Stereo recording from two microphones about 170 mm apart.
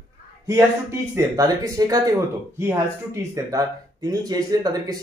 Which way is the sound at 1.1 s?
20° right (ahead or behind).